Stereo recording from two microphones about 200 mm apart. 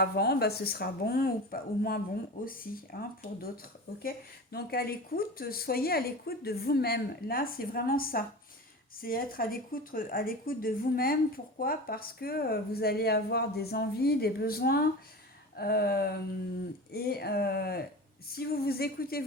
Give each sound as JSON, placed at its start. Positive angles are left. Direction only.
{"t": 0.0, "sound": "a woman's voice", "side_deg": 55}
{"t": 4.5, "sound": "a woman's voice", "side_deg": 50}